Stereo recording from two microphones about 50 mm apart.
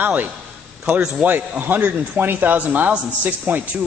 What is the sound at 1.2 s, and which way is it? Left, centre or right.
Speech, centre.